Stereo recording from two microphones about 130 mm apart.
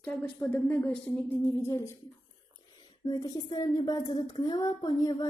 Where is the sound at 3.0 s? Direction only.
30° left (ahead or behind).